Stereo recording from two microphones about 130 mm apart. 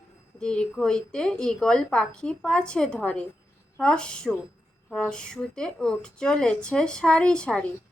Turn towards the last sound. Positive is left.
turn(degrees=5)  # may be behind; listen again after turning